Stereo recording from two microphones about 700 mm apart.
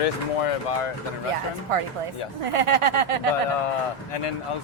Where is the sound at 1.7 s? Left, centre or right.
Right.